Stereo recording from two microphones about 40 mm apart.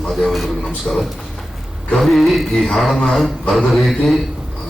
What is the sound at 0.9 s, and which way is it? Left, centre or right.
Speech, left.